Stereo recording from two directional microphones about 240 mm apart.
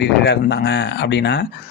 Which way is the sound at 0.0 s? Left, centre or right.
Left.